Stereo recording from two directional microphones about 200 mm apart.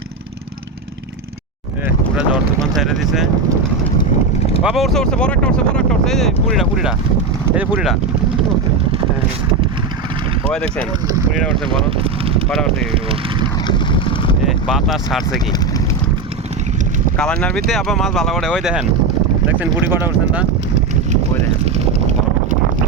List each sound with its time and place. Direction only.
2.1 s speech: centre (ahead or behind)
4.6 s speech: centre (ahead or behind)
10.5 s speech: 5° left (ahead or behind)
11.9 s a sound: 25° right (ahead or behind)
12.5 s speech: 5° left (ahead or behind)
12.9 s speech: 30° right (ahead or behind)
13.7 s boat: 25° left (ahead or behind)
14.4 s speech: centre (ahead or behind)
17.2 s speech: 5° left (ahead or behind)